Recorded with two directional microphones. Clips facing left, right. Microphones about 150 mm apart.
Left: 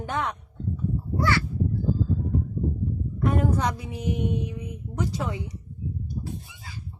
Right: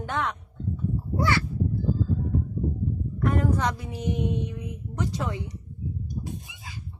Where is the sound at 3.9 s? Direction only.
5° left (ahead or behind).